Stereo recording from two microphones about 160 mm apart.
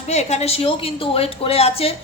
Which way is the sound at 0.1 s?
45° left (ahead or behind).